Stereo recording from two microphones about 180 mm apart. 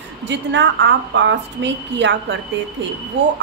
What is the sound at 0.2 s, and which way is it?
A woman's voice, 80° right.